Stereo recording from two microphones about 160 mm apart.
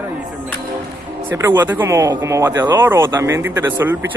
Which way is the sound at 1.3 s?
15° right (ahead or behind).